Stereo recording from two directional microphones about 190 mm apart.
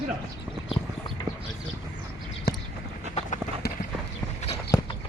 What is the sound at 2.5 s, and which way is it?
Clip-clop, 55° left (ahead or behind).